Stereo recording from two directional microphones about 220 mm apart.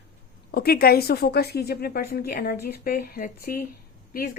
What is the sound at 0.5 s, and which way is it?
A woman's voice, 45° left (ahead or behind).